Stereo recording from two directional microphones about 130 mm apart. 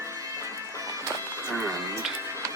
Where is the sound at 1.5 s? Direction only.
25° right (ahead or behind).